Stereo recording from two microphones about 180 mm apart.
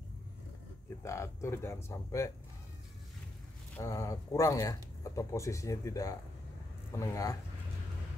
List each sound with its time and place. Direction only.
1.0 s speech: 15° left (ahead or behind)
3.7 s speech: 20° left (ahead or behind)